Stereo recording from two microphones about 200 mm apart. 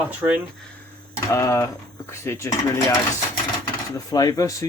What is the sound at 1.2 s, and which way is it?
Speech, 15° left (ahead or behind).